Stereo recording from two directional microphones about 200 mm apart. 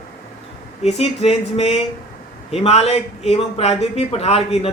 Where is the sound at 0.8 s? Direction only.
30° left (ahead or behind).